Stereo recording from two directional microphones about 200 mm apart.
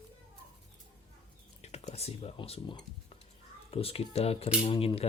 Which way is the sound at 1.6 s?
35° left (ahead or behind).